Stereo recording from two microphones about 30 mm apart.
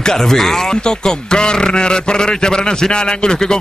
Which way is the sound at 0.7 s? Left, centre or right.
Left.